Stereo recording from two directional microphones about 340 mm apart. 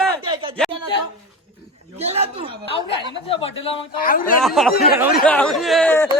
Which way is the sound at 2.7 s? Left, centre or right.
Centre.